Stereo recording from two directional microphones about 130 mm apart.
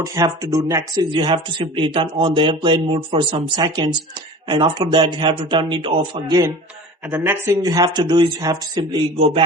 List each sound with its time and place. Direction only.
0.0 s speech: 25° right (ahead or behind)
1.1 s speech: 40° right (ahead or behind)
7.1 s speech: 20° right (ahead or behind)
9.1 s a man's voice: 50° right (ahead or behind)